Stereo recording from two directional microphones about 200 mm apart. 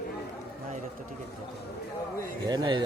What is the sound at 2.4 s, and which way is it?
Speech, 20° right (ahead or behind).